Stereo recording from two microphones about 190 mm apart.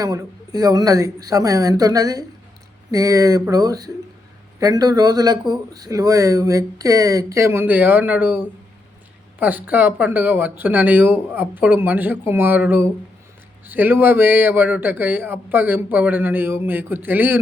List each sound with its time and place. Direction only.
0.0 s speech: 20° right (ahead or behind)